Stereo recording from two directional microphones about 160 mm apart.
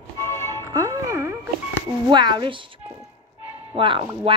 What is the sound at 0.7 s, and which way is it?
Music, 20° right (ahead or behind).